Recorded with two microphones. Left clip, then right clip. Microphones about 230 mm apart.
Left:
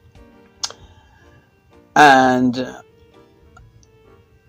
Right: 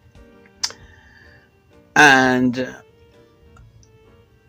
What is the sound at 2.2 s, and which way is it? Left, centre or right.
Speech, right.